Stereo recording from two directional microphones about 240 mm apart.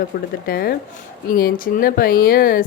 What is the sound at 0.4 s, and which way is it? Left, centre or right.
Speech, left.